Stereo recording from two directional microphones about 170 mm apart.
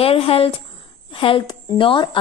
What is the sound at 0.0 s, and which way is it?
A woman's voice, 35° left (ahead or behind).